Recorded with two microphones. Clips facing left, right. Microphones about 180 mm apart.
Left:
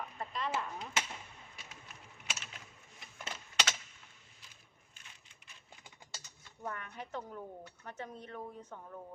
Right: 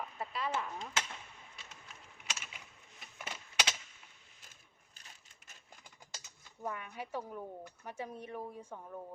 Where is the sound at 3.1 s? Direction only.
10° right (ahead or behind).